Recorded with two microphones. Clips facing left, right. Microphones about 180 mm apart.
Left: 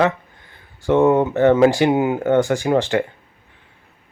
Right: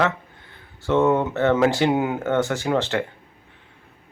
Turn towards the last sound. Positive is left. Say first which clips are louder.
# left 4 dB
turn(degrees=15)  # may be behind; listen again after turning